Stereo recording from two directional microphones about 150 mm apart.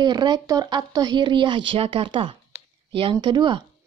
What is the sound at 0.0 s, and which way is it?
Speech, 30° right (ahead or behind).